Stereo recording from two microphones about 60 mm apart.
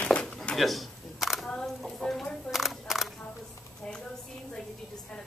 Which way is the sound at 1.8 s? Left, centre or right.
Centre.